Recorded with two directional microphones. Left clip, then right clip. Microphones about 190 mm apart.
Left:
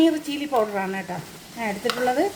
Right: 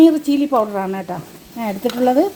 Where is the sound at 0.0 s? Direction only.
35° right (ahead or behind).